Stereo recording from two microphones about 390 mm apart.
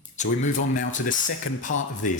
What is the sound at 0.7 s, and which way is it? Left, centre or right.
Speech, centre.